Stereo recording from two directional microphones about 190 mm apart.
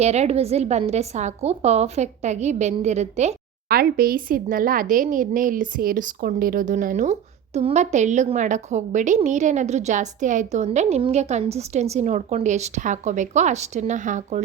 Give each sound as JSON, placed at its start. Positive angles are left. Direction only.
{"t": 0.0, "sound": "a woman's voice", "side_deg": -35}
{"t": 3.7, "sound": "a woman's voice", "side_deg": -55}